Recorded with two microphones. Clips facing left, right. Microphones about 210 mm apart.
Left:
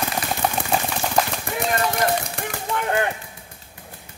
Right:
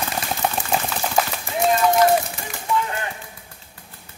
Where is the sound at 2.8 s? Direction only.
60° left (ahead or behind).